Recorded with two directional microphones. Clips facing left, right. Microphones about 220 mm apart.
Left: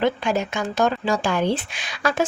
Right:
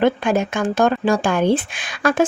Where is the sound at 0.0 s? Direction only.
50° right (ahead or behind).